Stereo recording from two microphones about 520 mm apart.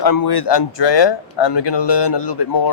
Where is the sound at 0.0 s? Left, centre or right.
Left.